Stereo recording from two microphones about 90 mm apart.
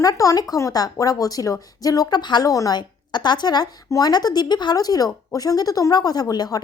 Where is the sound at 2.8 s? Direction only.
55° left (ahead or behind).